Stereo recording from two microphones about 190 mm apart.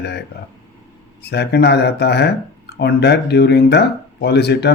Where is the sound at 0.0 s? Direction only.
60° left (ahead or behind).